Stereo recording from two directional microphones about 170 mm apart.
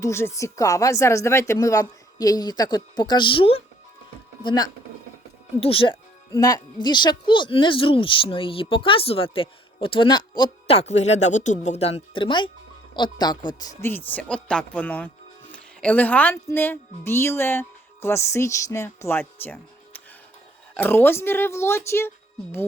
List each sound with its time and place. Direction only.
0.0 s a woman's voice: 15° left (ahead or behind)
5.5 s speech: 35° left (ahead or behind)
6.3 s a woman's voice: 20° left (ahead or behind)
13.8 s speech: 10° left (ahead or behind)
20.7 s speech: 10° left (ahead or behind)